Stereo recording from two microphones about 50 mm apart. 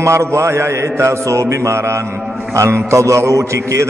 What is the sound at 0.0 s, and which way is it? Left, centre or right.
Mantra, right.